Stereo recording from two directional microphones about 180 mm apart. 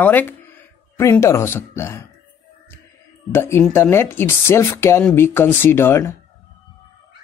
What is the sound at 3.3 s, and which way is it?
Speech, 15° left (ahead or behind).